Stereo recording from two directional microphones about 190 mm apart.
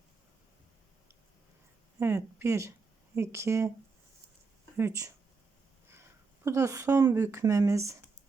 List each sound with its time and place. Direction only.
2.0 s speech: 15° right (ahead or behind)
4.8 s speech: 15° right (ahead or behind)